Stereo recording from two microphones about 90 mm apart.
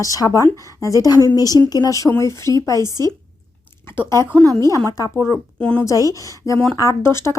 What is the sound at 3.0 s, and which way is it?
Speech, 45° right (ahead or behind).